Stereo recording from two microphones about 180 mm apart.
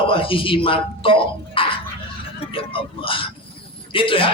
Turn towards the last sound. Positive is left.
turn(degrees=30)  # may be behind; listen again after turning